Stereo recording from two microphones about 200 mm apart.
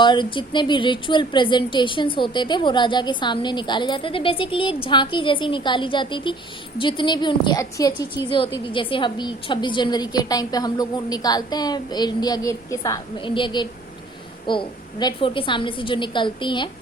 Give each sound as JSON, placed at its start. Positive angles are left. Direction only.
{"t": 0.0, "sound": "a woman's voice", "side_deg": 25}